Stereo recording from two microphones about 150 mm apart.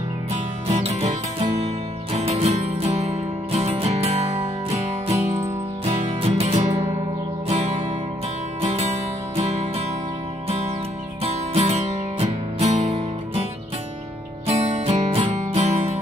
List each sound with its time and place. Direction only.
0.3 s music: 45° right (ahead or behind)
11.5 s music: 45° right (ahead or behind)
14.8 s music: 45° right (ahead or behind)